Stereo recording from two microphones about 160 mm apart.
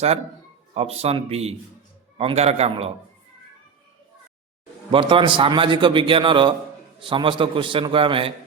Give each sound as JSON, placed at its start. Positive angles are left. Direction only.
{"t": 0.7, "sound": "a man's voice", "side_deg": -40}
{"t": 4.9, "sound": "a man's voice", "side_deg": -35}